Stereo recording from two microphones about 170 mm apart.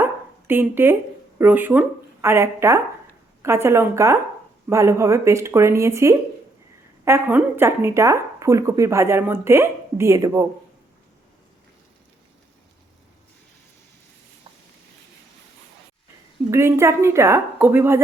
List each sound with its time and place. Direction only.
0.0 s dog: 10° right (ahead or behind)
1.4 s speech: 10° right (ahead or behind)
16.5 s speech: 15° right (ahead or behind)